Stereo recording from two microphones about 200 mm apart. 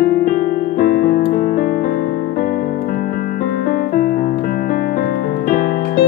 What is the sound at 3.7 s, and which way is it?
Piano, 45° left (ahead or behind).